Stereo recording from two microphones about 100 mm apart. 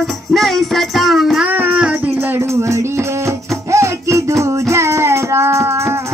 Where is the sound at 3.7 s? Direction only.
30° right (ahead or behind).